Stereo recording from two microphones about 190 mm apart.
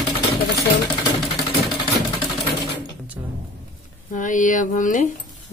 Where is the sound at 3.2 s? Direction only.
15° right (ahead or behind).